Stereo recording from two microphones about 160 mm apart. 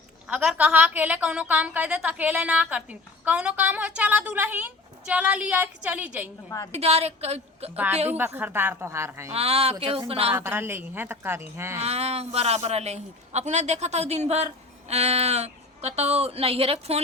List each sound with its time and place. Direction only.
0.3 s a woman's voice: 5° right (ahead or behind)
6.7 s a man's voice: 40° right (ahead or behind)
8.1 s a woman's voice: 15° right (ahead or behind)
9.3 s a man's voice: 40° right (ahead or behind)
10.3 s a woman's voice: 15° right (ahead or behind)
11.8 s a man's voice: 40° right (ahead or behind)